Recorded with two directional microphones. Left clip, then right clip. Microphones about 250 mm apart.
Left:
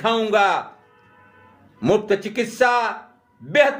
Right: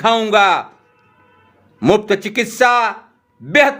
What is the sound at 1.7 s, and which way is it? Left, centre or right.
A man's voice, right.